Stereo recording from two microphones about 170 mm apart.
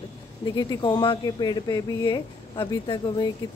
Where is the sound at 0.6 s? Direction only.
25° left (ahead or behind).